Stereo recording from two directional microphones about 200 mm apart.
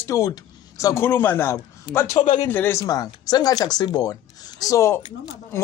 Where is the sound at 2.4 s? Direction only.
10° left (ahead or behind).